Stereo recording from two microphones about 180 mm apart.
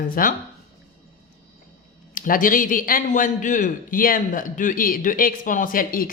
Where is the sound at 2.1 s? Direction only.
50° left (ahead or behind).